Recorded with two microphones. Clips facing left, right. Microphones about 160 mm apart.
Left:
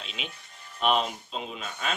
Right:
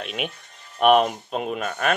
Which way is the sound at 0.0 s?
55° right (ahead or behind).